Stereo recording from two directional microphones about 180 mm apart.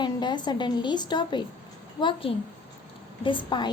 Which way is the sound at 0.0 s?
25° left (ahead or behind).